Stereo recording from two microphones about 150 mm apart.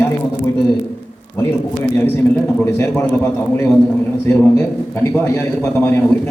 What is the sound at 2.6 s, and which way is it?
A man's voice, 15° left (ahead or behind).